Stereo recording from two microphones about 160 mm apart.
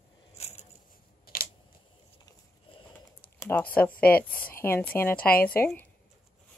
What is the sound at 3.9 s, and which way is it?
Speech, 70° left (ahead or behind).